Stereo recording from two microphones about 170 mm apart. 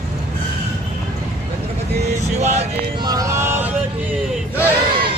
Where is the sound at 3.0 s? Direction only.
20° right (ahead or behind).